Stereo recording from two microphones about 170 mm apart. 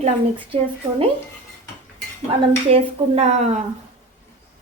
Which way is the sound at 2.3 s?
35° right (ahead or behind).